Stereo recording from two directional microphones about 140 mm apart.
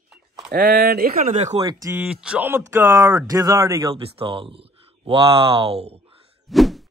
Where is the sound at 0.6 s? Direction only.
90° right.